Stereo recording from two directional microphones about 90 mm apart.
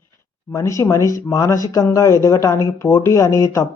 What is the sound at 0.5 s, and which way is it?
A man's voice, 35° left (ahead or behind).